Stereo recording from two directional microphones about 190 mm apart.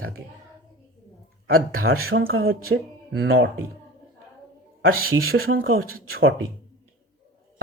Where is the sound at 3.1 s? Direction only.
80° right.